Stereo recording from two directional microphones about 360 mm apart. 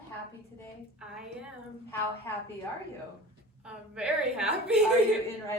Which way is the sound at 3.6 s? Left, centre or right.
Centre.